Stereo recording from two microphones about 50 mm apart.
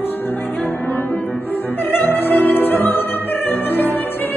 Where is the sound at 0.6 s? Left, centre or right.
Left.